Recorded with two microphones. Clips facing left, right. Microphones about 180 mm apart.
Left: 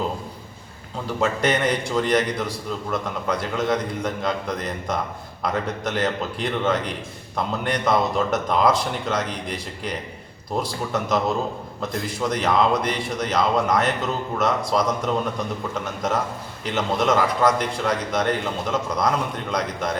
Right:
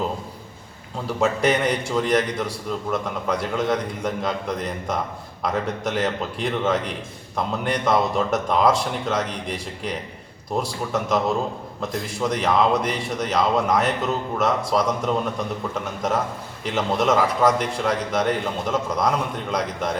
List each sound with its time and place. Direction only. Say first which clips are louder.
1.0 s a man's voice: right 2 dB; 5° right (ahead or behind)
16.7 s a man's voice: right 1 dB; 5° right (ahead or behind)